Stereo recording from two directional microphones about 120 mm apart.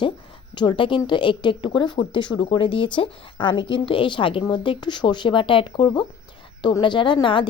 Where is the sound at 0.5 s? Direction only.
40° left (ahead or behind).